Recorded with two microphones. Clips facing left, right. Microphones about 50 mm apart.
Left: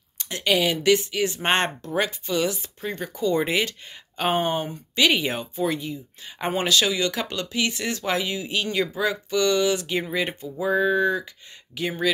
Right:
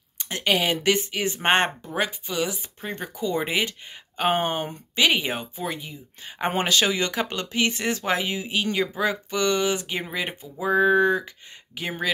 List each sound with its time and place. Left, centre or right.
0.2 s speech: right; by 2.7 s centre
2.8 s speech: right
3.2 s speech: centre
4.4 s speech: right
4.9 s speech: centre
6.5 s speech: right
11.7 s speech: right